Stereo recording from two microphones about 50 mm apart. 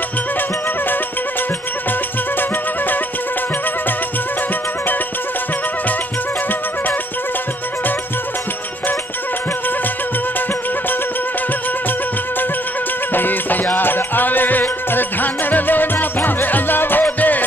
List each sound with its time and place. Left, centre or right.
13.1 s music: left